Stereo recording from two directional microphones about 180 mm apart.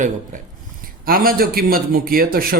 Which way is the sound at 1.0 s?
55° right (ahead or behind).